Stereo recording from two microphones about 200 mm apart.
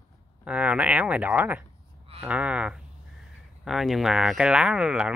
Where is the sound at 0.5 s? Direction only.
5° right (ahead or behind).